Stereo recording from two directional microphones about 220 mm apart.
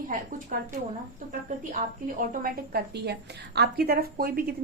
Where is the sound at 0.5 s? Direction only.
40° right (ahead or behind).